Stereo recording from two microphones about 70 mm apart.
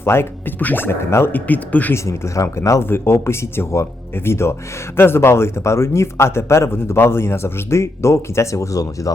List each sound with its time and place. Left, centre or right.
0.0 s a man's voice: left
1.3 s speech: left
2.0 s a man's voice: left